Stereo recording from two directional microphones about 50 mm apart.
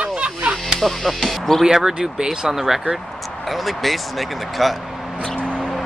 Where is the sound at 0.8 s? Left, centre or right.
Centre.